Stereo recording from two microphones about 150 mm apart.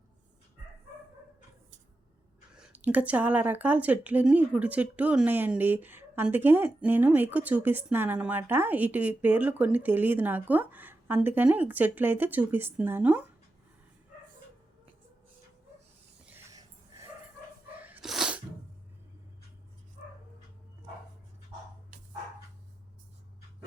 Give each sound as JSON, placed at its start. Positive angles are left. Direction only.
{"t": 2.6, "sound": "speech", "side_deg": -10}
{"t": 16.3, "sound": "snort", "side_deg": -20}
{"t": 17.7, "sound": "a sound", "side_deg": -10}